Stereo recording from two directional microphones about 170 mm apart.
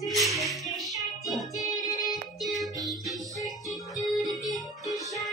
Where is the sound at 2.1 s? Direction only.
Centre (ahead or behind).